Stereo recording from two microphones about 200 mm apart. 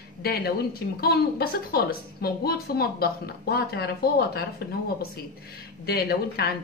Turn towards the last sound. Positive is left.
turn(degrees=50)  # may be behind; listen again after turning